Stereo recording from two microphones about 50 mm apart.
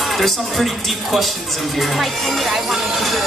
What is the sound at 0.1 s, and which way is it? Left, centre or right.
Speech, centre.